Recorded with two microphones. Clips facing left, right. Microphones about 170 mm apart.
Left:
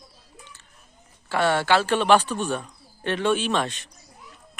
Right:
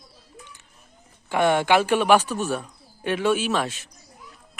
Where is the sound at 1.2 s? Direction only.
15° right (ahead or behind).